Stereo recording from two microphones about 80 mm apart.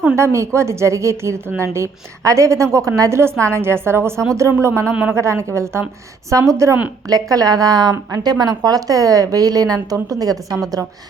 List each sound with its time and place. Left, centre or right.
0.2 s a woman's voice: right